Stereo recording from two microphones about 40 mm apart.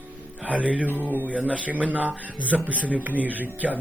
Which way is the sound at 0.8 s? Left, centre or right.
Right.